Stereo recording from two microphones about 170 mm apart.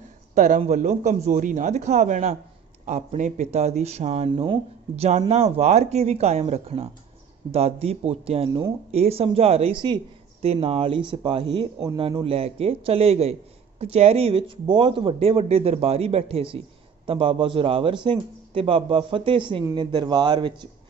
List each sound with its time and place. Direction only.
0.3 s a man's voice: 45° right (ahead or behind); by 20.5 s 25° right (ahead or behind)